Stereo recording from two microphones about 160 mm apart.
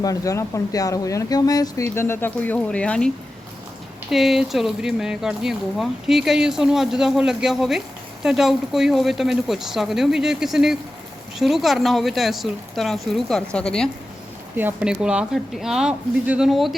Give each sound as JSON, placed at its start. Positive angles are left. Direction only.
{"t": 0.0, "sound": "speech", "side_deg": 20}
{"t": 4.1, "sound": "speech", "side_deg": 0}
{"t": 14.5, "sound": "speech", "side_deg": -10}